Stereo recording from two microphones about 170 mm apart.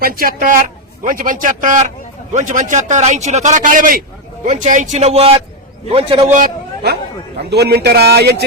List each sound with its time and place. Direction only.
0.0 s a man's voice: 55° right (ahead or behind); by 6.3 s 30° right (ahead or behind)
6.8 s a man's voice: 70° right (ahead or behind)